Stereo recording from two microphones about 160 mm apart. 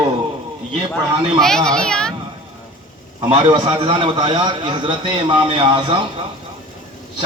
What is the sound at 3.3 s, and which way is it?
A man's voice, 35° right (ahead or behind).